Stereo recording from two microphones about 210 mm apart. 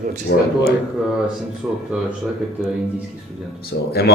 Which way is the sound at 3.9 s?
50° left (ahead or behind).